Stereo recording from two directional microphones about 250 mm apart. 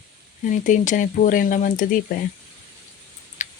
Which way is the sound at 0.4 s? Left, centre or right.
Left.